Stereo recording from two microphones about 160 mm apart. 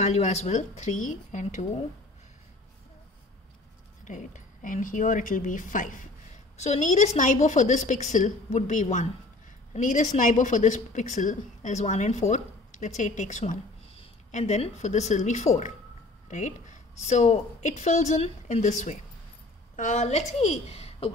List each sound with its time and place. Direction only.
0.0 s a woman's voice: 45° left (ahead or behind)
4.0 s a woman's voice: 50° left (ahead or behind)